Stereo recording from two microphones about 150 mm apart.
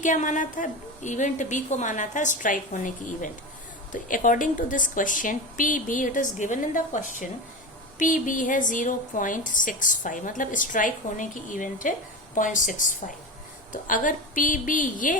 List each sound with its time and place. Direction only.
0.0 s a woman's voice: 55° left (ahead or behind)